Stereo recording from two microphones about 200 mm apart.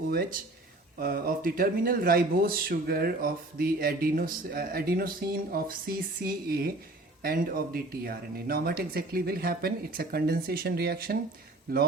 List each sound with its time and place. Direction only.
0.1 s speech: 50° right (ahead or behind)